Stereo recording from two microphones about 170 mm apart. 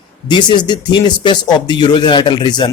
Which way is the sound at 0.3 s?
25° left (ahead or behind).